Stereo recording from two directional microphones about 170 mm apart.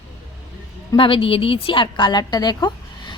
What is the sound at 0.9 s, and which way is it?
A woman's voice, 30° left (ahead or behind).